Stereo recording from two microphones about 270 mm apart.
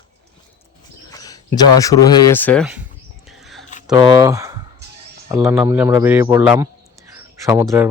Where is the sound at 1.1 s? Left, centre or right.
Centre.